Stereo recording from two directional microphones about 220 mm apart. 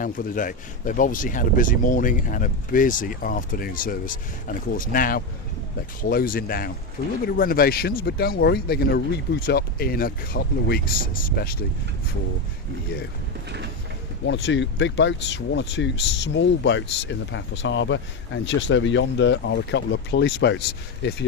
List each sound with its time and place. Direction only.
0.0 s speech: 40° left (ahead or behind)
14.3 s speech: 55° left (ahead or behind)